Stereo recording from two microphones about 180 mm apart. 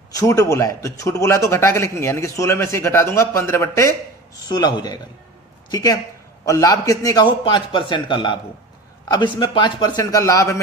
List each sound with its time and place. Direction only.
0.1 s a man's voice: 15° left (ahead or behind)